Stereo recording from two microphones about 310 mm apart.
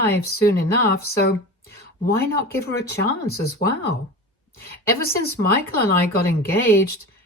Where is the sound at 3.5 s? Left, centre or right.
Left.